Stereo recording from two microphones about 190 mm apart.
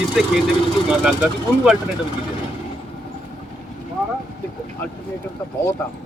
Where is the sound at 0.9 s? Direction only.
5° right (ahead or behind).